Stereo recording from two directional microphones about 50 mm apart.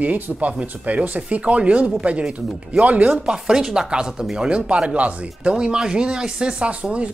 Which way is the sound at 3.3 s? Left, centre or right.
Centre.